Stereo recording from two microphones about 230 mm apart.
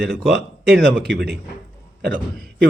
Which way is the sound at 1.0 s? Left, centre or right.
Right.